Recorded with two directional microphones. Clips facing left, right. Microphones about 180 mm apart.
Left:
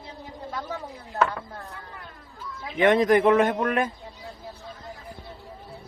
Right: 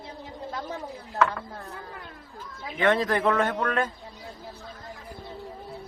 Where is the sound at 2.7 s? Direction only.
15° left (ahead or behind).